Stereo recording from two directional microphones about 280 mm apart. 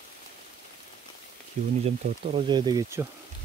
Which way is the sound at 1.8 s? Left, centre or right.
Right.